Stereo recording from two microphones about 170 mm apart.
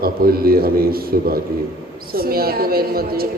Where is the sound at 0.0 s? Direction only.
60° right (ahead or behind).